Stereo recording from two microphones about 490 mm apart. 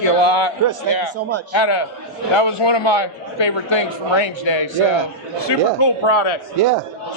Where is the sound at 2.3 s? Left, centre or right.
Left.